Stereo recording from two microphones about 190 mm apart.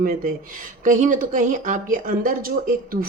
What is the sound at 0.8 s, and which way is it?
Speech, 45° right (ahead or behind).